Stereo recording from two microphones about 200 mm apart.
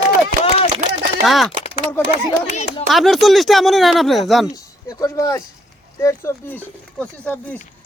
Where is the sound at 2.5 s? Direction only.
35° left (ahead or behind).